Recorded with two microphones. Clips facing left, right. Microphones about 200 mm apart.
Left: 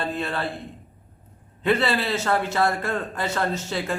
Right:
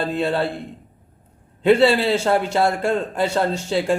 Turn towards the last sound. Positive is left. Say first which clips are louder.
# right 6 dB
turn(degrees=-30)  # may be behind; listen again after turning